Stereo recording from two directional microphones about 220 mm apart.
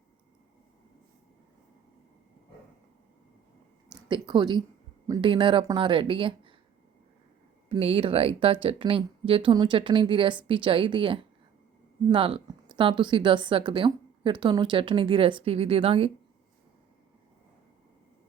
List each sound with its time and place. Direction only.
4.1 s speech: 20° right (ahead or behind)
7.7 s speech: 25° right (ahead or behind)